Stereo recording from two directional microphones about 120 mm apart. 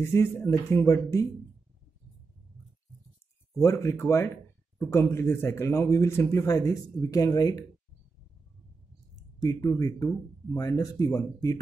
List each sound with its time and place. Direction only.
0.0 s speech: 20° left (ahead or behind)
3.6 s speech: 25° left (ahead or behind)
9.1 s speech: 30° left (ahead or behind)